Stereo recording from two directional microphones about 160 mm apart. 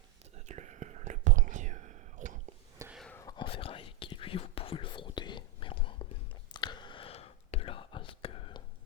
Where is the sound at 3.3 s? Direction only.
35° left (ahead or behind).